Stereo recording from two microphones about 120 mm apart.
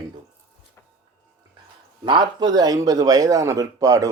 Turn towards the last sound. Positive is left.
turn(degrees=-30)  # may be behind; listen again after turning